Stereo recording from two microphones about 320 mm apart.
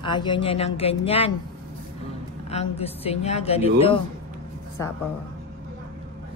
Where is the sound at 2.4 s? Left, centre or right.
Centre.